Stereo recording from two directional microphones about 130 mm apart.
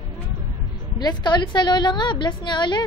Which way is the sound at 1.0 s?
35° left (ahead or behind).